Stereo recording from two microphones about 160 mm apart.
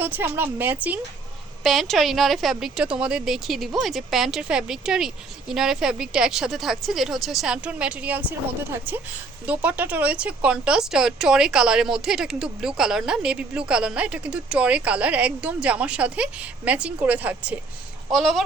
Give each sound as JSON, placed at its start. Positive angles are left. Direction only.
{"t": 0.0, "sound": "speech", "side_deg": -15}
{"t": 1.6, "sound": "speech", "side_deg": 0}